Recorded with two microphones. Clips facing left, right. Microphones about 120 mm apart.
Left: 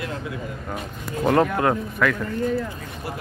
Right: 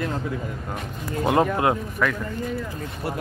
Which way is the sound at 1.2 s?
15° right (ahead or behind).